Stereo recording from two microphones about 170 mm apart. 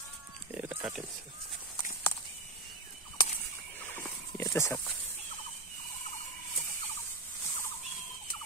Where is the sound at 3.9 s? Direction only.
15° left (ahead or behind).